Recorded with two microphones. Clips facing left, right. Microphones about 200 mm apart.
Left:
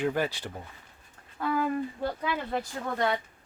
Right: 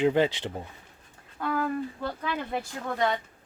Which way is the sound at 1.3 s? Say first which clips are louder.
Even; 5° left (ahead or behind).